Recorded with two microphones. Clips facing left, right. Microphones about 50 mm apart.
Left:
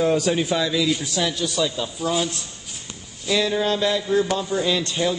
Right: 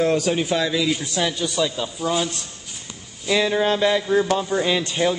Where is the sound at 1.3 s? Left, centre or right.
Centre.